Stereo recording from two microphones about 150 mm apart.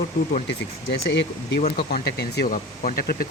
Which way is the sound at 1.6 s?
45° left (ahead or behind).